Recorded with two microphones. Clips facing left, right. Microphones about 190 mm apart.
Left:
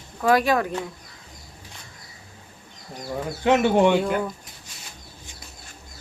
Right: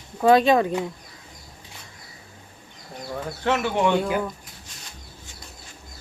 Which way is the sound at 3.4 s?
15° left (ahead or behind).